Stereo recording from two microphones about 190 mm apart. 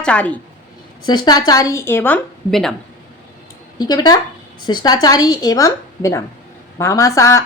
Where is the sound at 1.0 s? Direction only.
25° left (ahead or behind); by 2.7 s centre (ahead or behind).